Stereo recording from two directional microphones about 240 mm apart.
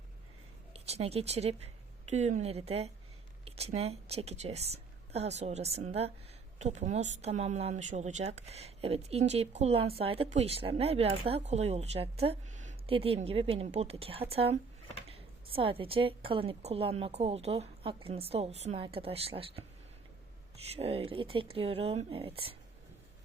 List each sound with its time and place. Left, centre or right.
0.7 s speech: right
20.7 s speech: right